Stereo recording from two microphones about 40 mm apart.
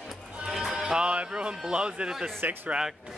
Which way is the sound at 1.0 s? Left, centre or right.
Right.